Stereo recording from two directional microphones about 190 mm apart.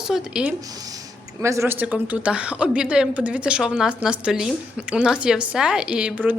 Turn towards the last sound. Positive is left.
turn(degrees=-10)  # may be behind; listen again after turning